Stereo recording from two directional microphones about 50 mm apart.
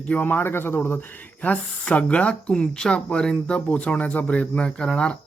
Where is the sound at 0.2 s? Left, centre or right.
Left.